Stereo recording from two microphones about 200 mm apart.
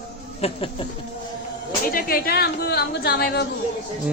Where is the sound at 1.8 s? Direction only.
45° left (ahead or behind).